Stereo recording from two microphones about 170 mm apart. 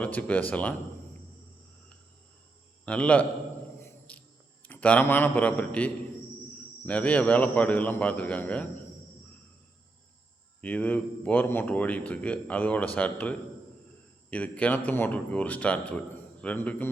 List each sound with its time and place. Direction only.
0.0 s speech: 10° left (ahead or behind)
2.8 s speech: 5° left (ahead or behind)
3.8 s cricket: 10° left (ahead or behind)
4.6 s speech: 10° left (ahead or behind)
10.6 s speech: 10° left (ahead or behind)